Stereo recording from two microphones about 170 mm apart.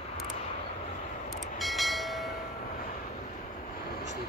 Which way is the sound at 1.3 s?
Centre (ahead or behind).